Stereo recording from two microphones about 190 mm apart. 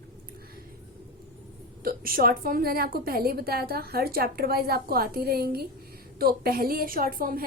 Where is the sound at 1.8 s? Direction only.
50° right (ahead or behind).